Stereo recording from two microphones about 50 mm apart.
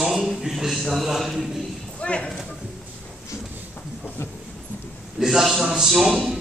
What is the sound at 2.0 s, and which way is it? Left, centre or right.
Speech, left.